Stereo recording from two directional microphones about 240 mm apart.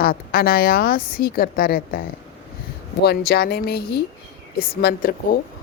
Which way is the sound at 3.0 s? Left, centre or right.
Left.